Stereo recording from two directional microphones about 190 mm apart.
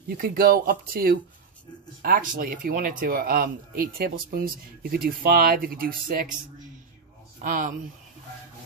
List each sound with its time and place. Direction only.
0.2 s speech: 50° right (ahead or behind)
7.4 s speech: 45° right (ahead or behind)